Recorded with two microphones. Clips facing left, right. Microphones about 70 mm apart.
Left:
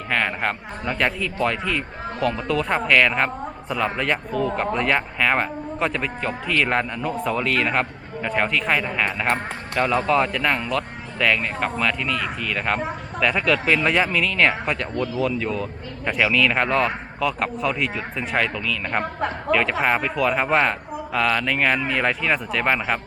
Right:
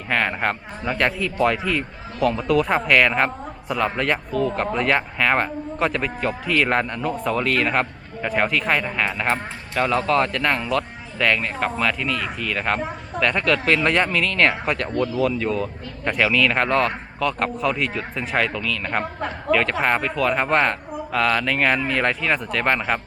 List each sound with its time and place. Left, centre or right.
0.1 s speech: centre